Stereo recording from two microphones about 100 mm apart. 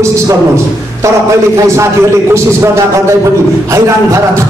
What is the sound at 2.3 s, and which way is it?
A man's voice, 30° right (ahead or behind).